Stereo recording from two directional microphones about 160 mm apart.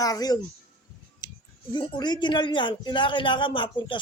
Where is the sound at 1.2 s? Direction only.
25° left (ahead or behind).